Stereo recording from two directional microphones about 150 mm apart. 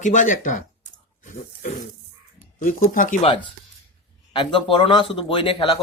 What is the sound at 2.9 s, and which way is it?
Speech, 60° left (ahead or behind).